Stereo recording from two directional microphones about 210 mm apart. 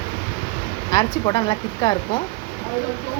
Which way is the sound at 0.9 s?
20° left (ahead or behind).